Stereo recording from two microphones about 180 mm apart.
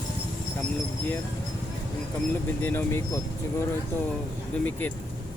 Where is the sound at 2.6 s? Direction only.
10° left (ahead or behind).